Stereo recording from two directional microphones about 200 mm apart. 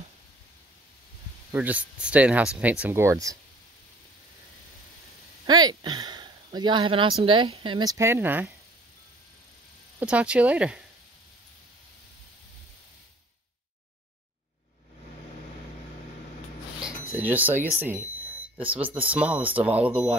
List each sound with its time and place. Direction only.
1.5 s speech: 5° right (ahead or behind)
5.5 s speech: 20° right (ahead or behind)
9.9 s speech: 5° right (ahead or behind)
17.1 s speech: 10° right (ahead or behind)